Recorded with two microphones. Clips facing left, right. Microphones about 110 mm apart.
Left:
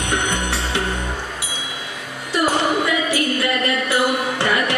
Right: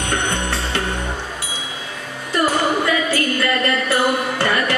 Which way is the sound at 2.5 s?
20° left (ahead or behind).